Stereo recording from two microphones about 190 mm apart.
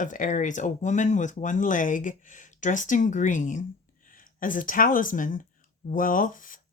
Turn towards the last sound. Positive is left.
turn(degrees=45)  # may be behind; listen again after turning